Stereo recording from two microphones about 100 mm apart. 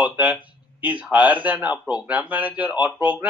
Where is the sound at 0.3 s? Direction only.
15° right (ahead or behind).